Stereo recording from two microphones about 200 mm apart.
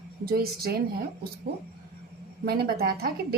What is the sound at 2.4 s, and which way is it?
Speech, 50° right (ahead or behind).